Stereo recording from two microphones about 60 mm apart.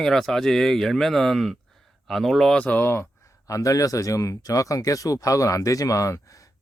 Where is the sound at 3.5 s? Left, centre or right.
Left.